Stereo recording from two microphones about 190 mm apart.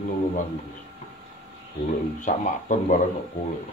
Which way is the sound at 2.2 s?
40° left (ahead or behind).